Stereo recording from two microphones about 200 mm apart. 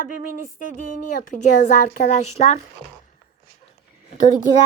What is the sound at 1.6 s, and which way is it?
Speech, 35° left (ahead or behind).